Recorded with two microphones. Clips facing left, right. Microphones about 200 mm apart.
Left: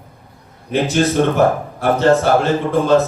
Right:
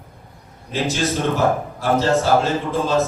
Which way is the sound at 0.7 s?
60° left (ahead or behind).